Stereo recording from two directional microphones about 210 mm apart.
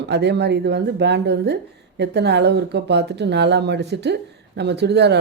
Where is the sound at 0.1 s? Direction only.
55° right (ahead or behind).